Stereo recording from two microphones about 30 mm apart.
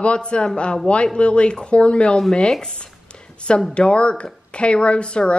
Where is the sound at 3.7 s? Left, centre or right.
Left.